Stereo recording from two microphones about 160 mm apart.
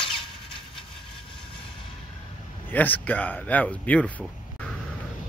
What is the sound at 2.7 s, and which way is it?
Speech, 10° left (ahead or behind).